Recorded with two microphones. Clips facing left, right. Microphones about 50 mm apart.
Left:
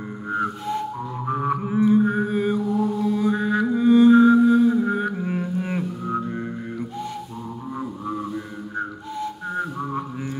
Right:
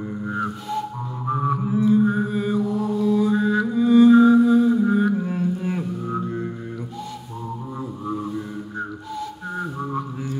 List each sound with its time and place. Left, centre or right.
0.3 s music: centre
1.5 s mantra: left
6.0 s music: centre
8.7 s whistling: left